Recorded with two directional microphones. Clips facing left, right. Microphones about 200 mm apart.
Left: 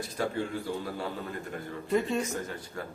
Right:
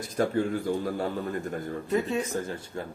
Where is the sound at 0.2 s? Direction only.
50° right (ahead or behind).